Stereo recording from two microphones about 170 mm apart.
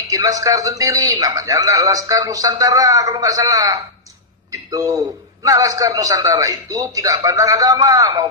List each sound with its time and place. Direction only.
0.1 s a man's voice: 20° right (ahead or behind)